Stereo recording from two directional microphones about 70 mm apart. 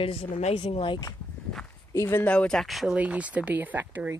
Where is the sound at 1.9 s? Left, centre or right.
Left.